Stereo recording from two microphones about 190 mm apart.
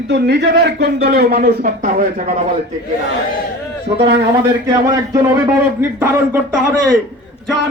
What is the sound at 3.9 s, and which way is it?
Speech, 35° right (ahead or behind).